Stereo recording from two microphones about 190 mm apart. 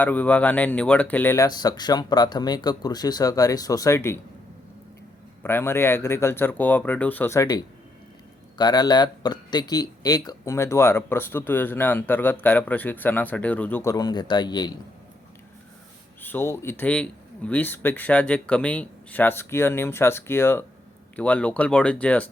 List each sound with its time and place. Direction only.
0.0 s speech: 10° left (ahead or behind)
5.4 s speech: 10° left (ahead or behind)
16.2 s speech: 10° left (ahead or behind)